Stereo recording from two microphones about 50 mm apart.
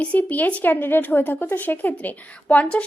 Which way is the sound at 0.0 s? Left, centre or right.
Left.